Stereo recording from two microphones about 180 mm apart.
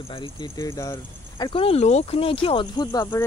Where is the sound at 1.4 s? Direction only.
30° left (ahead or behind).